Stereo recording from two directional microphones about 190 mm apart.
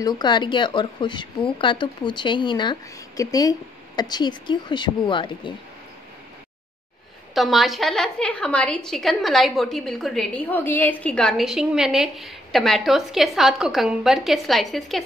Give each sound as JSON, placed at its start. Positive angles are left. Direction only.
{"t": 0.0, "sound": "speech", "side_deg": 25}
{"t": 7.3, "sound": "a woman's voice", "side_deg": 0}